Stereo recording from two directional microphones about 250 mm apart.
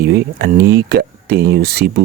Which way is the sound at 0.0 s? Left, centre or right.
Right.